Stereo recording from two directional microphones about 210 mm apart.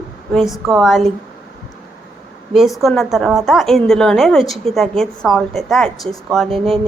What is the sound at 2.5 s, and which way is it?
A woman's voice, centre (ahead or behind).